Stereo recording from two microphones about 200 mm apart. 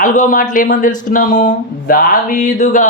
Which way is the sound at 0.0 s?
40° left (ahead or behind).